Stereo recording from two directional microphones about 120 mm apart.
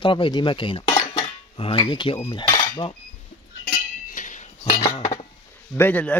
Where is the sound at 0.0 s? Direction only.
45° left (ahead or behind).